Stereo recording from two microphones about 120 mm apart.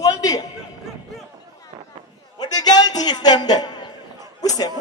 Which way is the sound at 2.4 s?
35° left (ahead or behind).